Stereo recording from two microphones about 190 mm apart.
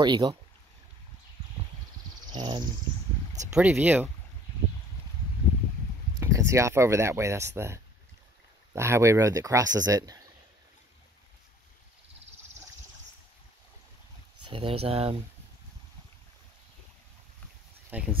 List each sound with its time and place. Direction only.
0.0 s speech: 25° right (ahead or behind)
2.3 s speech: 25° right (ahead or behind)
3.5 s speech: 10° right (ahead or behind)
6.1 s speech: 15° right (ahead or behind)
14.5 s speech: 30° right (ahead or behind)
17.8 s speech: 5° right (ahead or behind)